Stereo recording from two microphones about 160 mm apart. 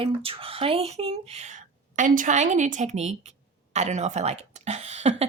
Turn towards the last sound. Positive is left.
turn(degrees=-40)  # may be behind; listen again after turning